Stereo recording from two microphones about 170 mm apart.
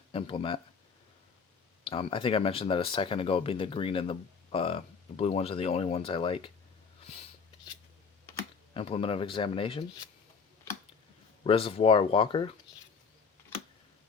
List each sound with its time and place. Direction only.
0.1 s speech: 30° left (ahead or behind)
1.8 s speech: 35° left (ahead or behind)
8.7 s speech: 35° left (ahead or behind)
11.4 s speech: 35° left (ahead or behind)